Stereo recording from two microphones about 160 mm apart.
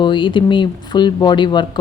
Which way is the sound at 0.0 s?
30° left (ahead or behind).